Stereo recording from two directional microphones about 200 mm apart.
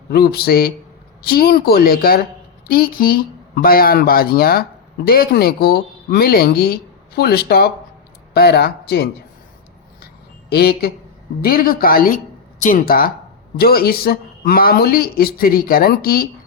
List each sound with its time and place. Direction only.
0.1 s speech: 50° left (ahead or behind)
10.5 s speech: 50° left (ahead or behind)